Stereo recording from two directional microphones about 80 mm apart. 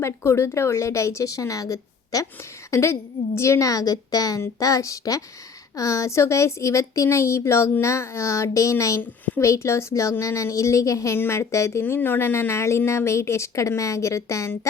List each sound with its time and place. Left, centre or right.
0.0 s speech: left
2.6 s a woman's voice: left
9.0 s a child's voice: left
9.4 s speech: left
11.8 s speech: left